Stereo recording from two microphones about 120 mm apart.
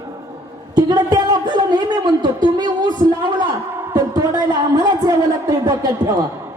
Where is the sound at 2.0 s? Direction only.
35° right (ahead or behind).